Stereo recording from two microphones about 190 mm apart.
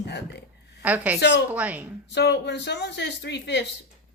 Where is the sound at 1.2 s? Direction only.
60° left (ahead or behind).